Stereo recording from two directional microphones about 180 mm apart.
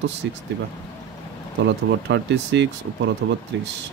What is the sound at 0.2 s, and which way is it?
Speech, 80° right.